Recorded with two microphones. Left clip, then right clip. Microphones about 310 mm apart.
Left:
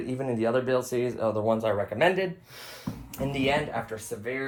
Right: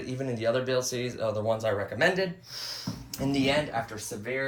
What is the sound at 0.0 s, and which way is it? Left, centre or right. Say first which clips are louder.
Speech: left 2 dB; centre.